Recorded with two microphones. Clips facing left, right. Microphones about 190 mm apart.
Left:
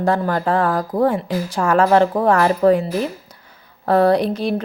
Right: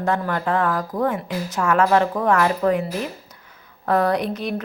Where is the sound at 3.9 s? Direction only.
30° left (ahead or behind).